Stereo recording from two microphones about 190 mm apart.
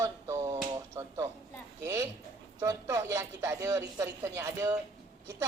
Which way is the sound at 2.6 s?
15° right (ahead or behind).